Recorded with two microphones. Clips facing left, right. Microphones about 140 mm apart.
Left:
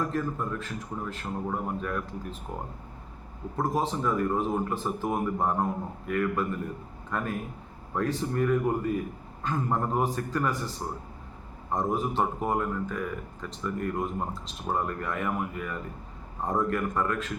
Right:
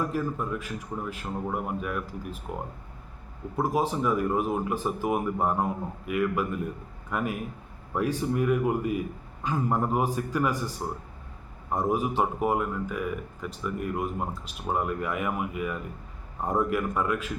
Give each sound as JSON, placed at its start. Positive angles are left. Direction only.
{"t": 0.0, "sound": "speech", "side_deg": -10}
{"t": 3.5, "sound": "speech", "side_deg": -10}